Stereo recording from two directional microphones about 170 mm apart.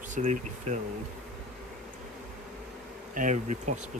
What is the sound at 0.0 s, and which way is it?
Speech, 45° right (ahead or behind).